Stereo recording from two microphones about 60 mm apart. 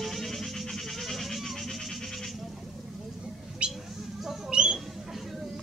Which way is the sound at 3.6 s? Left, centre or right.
Centre.